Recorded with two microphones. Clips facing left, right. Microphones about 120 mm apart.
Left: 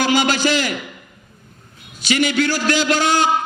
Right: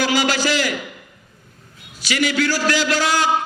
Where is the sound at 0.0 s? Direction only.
20° left (ahead or behind).